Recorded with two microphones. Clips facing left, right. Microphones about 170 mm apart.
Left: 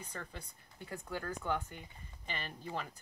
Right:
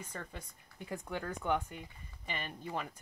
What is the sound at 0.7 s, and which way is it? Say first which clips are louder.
Speech: right 2 dB; 15° right (ahead or behind).